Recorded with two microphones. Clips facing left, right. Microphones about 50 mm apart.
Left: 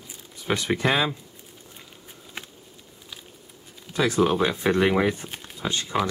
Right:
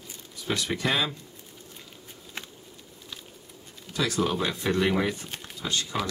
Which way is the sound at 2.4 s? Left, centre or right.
Centre.